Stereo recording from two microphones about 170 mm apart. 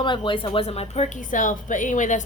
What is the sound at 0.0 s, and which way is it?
A woman's voice, 30° left (ahead or behind).